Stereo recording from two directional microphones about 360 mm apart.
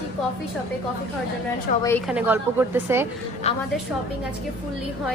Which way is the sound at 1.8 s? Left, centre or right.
Centre.